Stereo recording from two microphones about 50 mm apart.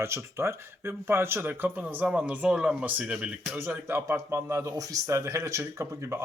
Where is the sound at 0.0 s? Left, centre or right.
Right.